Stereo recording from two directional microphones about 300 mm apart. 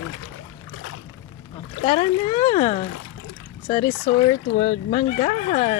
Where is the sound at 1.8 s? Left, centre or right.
Centre.